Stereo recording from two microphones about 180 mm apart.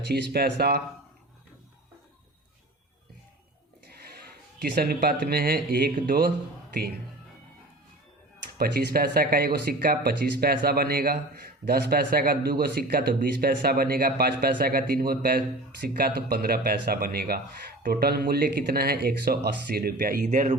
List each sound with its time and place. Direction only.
0.1 s speech: 60° right (ahead or behind)
3.8 s a sound: 60° right (ahead or behind)
4.6 s speech: 60° right (ahead or behind)
8.5 s speech: 55° right (ahead or behind)